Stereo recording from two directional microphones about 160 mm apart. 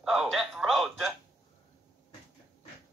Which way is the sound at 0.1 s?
Centre (ahead or behind).